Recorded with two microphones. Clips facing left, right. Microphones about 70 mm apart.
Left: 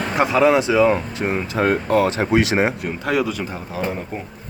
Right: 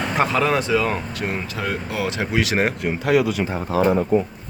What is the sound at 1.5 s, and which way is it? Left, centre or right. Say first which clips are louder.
Speech: left 8 dB; left.